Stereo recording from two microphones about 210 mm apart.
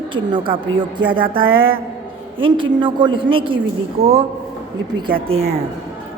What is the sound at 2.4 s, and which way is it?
A woman's voice, 25° right (ahead or behind).